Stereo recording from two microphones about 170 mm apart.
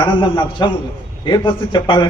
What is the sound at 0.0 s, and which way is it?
A man's voice, 30° left (ahead or behind).